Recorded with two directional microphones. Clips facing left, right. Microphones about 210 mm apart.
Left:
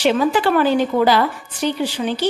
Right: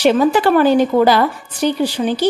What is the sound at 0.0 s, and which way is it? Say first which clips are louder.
A woman's voice: right 4 dB; 45° right (ahead or behind).